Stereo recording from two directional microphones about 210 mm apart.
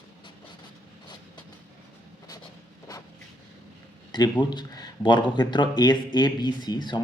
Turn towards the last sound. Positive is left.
turn(degrees=20)  # may be behind; listen again after turning